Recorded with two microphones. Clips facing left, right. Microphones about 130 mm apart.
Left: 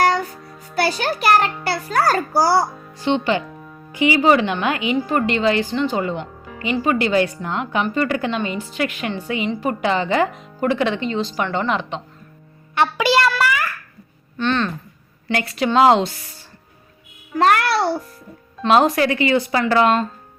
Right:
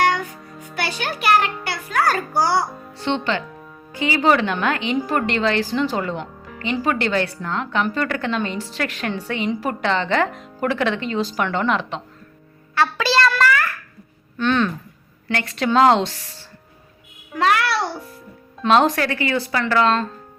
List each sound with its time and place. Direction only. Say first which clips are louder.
0.0 s music: left 2 dB; 35° left (ahead or behind)
0.8 s a child's voice: left 6 dB; 40° left (ahead or behind)
2.9 s speech: left 3 dB; 10° left (ahead or behind)
9.8 s speech: left 1 dB; 10° left (ahead or behind)
12.7 s a child's voice: left 2 dB; 15° left (ahead or behind)
13.4 s babbling: right 2 dB; 15° left (ahead or behind)
14.3 s speech: right 1 dB; 5° right (ahead or behind)
15.4 s speech: left 1 dB; 5° left (ahead or behind)
17.3 s child singing: left 3 dB; 45° left (ahead or behind)
18.7 s speech: left 1 dB; 5° left (ahead or behind)
18.9 s a woman's voice: left 4 dB; 15° left (ahead or behind)